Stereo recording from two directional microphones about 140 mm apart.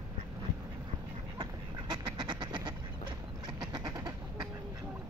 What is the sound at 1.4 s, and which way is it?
Duck, 30° right (ahead or behind).